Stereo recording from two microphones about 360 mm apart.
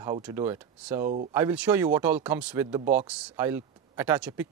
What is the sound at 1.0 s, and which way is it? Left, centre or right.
Speech, right.